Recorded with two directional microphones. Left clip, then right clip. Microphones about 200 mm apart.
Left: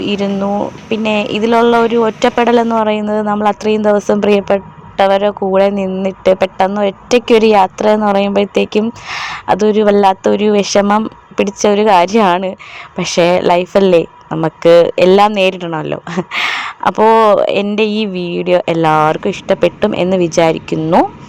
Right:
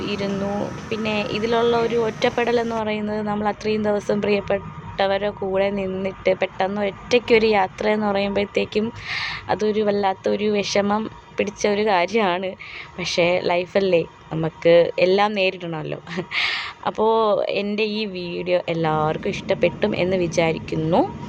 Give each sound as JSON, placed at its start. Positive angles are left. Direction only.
{"t": 0.0, "sound": "speech", "side_deg": 35}